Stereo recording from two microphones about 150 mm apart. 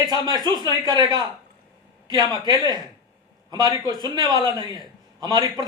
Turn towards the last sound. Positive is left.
turn(degrees=-30)  # may be behind; listen again after turning